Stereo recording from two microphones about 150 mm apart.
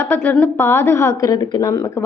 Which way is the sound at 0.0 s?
10° left (ahead or behind).